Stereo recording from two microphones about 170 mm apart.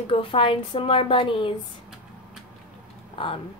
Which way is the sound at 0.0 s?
30° left (ahead or behind).